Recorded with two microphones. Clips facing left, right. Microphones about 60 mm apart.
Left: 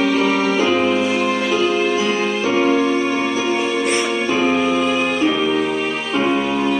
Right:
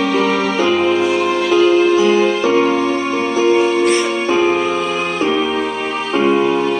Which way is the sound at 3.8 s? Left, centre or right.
Centre.